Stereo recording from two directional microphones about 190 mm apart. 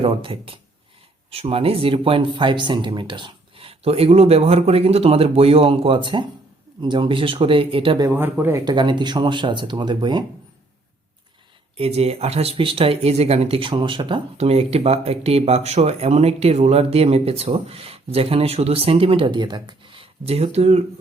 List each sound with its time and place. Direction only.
0.0 s speech: 30° right (ahead or behind)
8.1 s speech: 10° right (ahead or behind)
11.8 s speech: 30° right (ahead or behind)